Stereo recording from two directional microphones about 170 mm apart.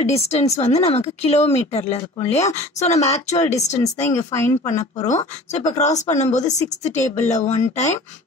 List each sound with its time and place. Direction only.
0.0 s speech: 40° left (ahead or behind)
3.8 s speech: 20° left (ahead or behind)
4.7 s speech: 45° left (ahead or behind)